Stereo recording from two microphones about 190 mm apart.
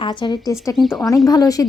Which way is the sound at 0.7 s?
Centre (ahead or behind).